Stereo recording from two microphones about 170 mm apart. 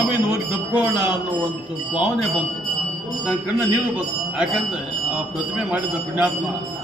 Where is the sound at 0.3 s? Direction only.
10° right (ahead or behind).